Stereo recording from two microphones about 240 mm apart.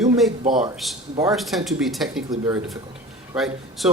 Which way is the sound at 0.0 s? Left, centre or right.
Centre.